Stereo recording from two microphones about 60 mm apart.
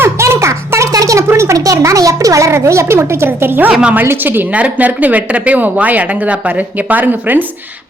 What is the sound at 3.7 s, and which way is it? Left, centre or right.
Speech, centre.